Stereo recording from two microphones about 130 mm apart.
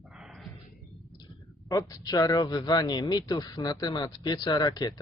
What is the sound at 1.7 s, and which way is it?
Speech, 25° left (ahead or behind).